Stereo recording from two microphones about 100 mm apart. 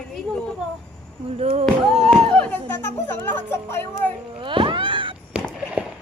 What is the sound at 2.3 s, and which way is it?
Speech, 10° left (ahead or behind).